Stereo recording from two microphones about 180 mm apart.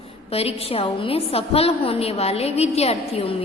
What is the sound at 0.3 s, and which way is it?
A woman's voice, 35° left (ahead or behind).